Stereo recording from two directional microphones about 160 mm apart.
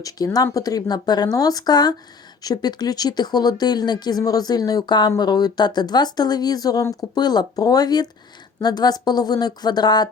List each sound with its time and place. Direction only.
0.0 s speech: 20° left (ahead or behind)